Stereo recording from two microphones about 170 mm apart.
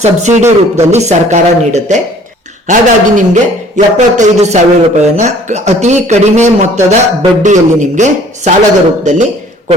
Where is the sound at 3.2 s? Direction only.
45° right (ahead or behind).